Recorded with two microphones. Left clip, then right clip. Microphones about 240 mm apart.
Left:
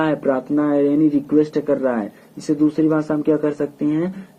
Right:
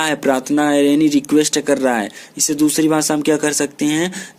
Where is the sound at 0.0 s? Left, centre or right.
Right.